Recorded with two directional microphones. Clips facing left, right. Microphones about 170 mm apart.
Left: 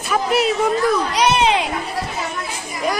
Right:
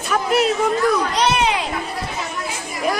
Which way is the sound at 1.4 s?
25° left (ahead or behind).